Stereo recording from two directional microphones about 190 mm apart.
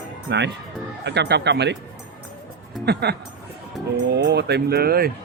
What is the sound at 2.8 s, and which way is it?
Speech, 60° right (ahead or behind).